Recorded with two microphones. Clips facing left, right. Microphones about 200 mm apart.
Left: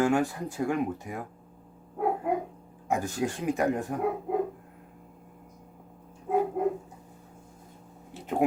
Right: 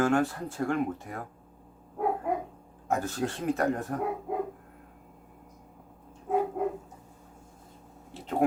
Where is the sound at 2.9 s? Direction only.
15° left (ahead or behind).